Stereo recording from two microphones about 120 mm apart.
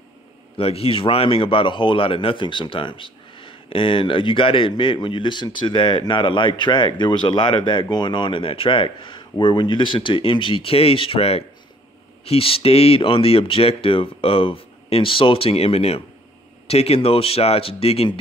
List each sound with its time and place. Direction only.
0.6 s speech: 55° left (ahead or behind)